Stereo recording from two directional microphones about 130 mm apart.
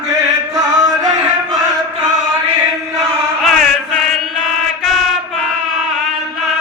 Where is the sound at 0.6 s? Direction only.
30° right (ahead or behind).